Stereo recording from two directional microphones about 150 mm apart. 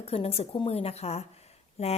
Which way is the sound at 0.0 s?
40° left (ahead or behind).